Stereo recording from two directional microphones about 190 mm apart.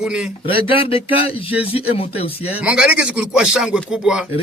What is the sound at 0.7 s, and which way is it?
Speech, 30° left (ahead or behind).